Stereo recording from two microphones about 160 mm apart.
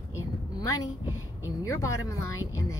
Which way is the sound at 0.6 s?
20° left (ahead or behind).